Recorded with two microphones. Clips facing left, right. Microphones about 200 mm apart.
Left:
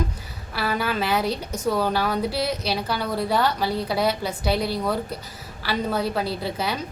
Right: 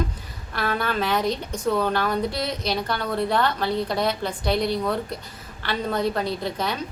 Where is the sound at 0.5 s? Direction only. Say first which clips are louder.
Even; 5° left (ahead or behind).